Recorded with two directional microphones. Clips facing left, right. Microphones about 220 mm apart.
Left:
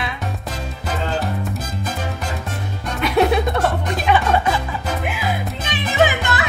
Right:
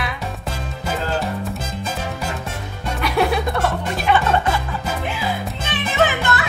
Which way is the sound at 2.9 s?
20° left (ahead or behind).